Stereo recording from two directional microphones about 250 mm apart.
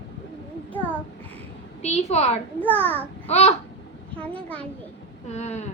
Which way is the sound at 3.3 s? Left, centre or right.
Left.